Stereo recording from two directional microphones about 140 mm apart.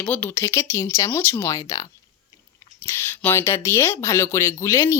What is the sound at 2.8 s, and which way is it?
Speech, 15° left (ahead or behind).